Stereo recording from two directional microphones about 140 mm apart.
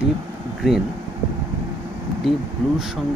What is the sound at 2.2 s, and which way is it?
Speech, 5° left (ahead or behind).